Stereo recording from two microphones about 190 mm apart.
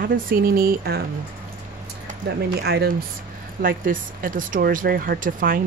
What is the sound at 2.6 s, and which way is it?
Speech, 55° right (ahead or behind).